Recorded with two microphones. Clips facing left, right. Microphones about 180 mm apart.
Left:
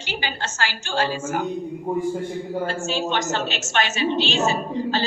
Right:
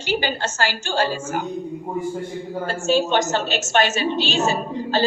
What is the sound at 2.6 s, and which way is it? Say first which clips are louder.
A woman's voice: right 9 dB; 40° right (ahead or behind).